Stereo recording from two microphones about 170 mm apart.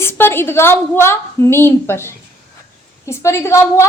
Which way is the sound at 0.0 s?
15° left (ahead or behind).